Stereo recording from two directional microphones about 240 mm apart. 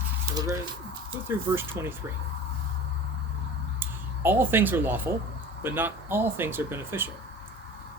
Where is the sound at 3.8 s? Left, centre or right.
Centre.